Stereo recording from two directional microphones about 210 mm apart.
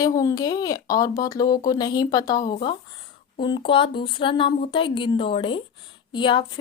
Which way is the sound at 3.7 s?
25° left (ahead or behind).